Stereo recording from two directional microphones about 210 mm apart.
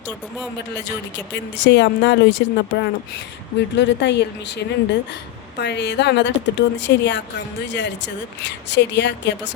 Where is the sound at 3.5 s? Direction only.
55° left (ahead or behind).